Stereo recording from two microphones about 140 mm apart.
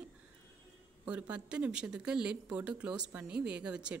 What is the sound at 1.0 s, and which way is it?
Speech, 10° right (ahead or behind).